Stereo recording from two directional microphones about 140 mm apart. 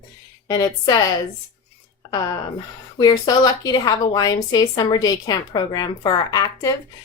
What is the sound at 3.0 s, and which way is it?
A woman's voice, 30° left (ahead or behind).